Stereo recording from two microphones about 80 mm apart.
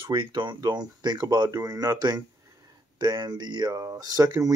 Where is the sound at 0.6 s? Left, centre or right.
Right.